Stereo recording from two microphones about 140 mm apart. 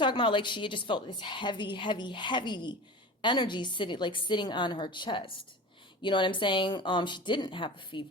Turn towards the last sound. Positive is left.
turn(degrees=35)  # may be behind; listen again after turning